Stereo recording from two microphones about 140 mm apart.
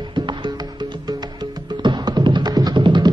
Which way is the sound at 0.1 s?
35° right (ahead or behind).